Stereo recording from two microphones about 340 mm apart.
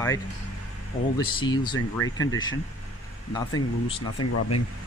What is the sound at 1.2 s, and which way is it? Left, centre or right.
Speech, centre.